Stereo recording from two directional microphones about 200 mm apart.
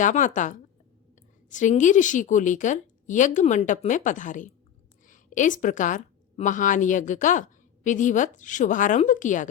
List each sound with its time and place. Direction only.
0.0 s a woman's voice: 40° left (ahead or behind)